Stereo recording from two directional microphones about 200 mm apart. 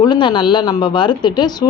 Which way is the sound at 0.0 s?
25° left (ahead or behind).